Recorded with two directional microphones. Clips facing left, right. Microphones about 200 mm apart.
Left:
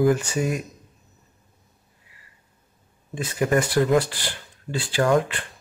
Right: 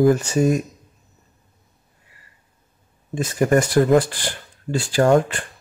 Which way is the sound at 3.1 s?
45° right (ahead or behind).